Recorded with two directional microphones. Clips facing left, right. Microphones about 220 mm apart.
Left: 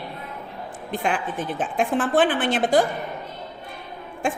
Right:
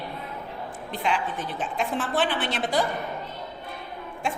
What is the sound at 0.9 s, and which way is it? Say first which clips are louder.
A woman's voice: left 3 dB; 50° left (ahead or behind).